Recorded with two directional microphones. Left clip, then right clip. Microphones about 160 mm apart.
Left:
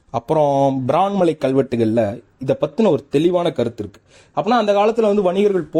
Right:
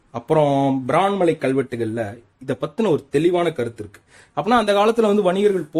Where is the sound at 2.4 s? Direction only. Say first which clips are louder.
Left 5 dB; 20° left (ahead or behind).